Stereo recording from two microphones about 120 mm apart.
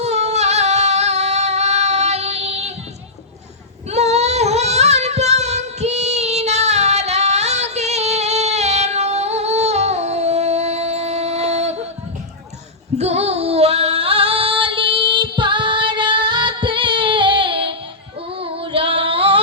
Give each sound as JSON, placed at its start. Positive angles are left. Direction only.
{"t": 0.0, "sound": "singing", "side_deg": -65}
{"t": 3.8, "sound": "child singing", "side_deg": -65}
{"t": 13.0, "sound": "female singing", "side_deg": -60}